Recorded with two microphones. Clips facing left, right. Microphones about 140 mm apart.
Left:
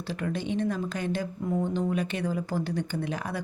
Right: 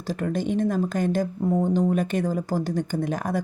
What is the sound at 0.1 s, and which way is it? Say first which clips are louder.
Speech: right 5 dB; 45° right (ahead or behind).